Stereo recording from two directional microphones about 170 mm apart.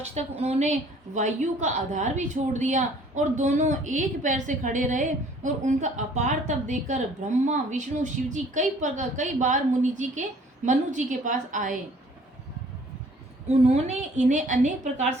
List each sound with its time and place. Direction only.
0.0 s a woman's voice: 40° right (ahead or behind)
13.5 s a woman's voice: 40° right (ahead or behind)